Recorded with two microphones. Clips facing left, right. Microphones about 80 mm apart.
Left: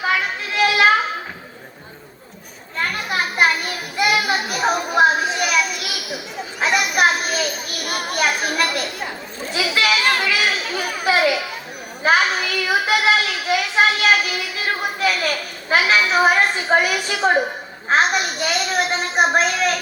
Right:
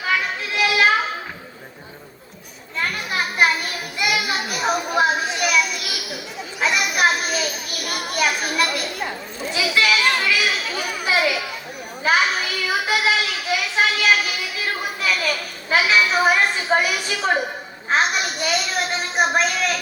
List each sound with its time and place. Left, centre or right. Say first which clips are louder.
0.1 s children playing: right 3 dB; left
2.9 s children playing: left 2 dB; left
12.0 s a sound: left 2 dB; left
17.8 s a woman's voice: left 3 dB; left